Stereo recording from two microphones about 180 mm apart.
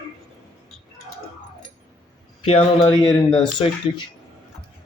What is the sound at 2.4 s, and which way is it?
Speech, 35° left (ahead or behind).